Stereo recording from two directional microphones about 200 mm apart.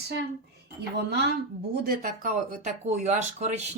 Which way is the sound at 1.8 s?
45° right (ahead or behind).